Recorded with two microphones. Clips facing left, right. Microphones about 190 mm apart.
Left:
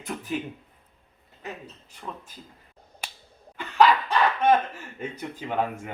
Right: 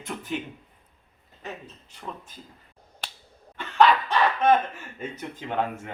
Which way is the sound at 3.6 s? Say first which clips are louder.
Even; 5° left (ahead or behind).